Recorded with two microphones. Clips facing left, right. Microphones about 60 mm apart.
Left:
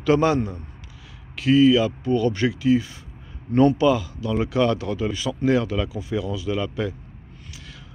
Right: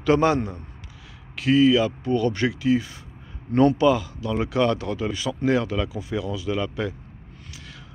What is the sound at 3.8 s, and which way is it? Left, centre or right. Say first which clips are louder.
Speech: even; right.